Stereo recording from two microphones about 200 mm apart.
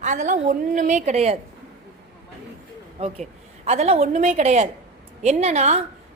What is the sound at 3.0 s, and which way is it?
A woman's voice, 30° right (ahead or behind).